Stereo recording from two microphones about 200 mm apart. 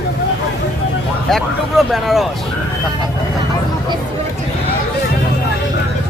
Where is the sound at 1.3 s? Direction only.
Centre (ahead or behind).